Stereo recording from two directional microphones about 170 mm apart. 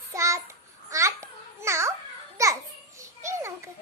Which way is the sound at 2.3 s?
20° right (ahead or behind).